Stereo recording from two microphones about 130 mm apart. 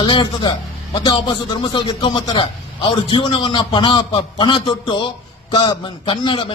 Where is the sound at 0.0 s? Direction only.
35° left (ahead or behind).